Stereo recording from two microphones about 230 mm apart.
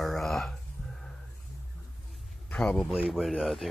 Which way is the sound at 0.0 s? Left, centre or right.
Centre.